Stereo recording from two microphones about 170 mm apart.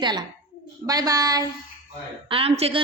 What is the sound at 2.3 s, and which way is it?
Speech, 35° right (ahead or behind).